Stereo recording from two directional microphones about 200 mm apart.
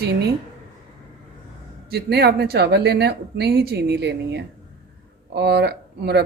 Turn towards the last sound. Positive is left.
turn(degrees=-55)  # may be behind; listen again after turning